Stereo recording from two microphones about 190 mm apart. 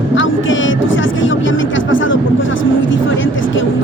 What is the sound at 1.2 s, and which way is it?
Speech, 85° left.